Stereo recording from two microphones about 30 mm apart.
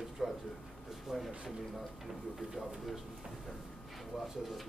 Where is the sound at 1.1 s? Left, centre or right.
Right.